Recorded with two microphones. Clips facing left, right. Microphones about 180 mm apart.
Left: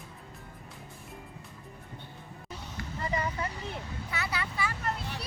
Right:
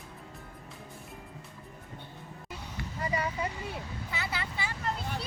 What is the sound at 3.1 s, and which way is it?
Vehicle, 10° right (ahead or behind).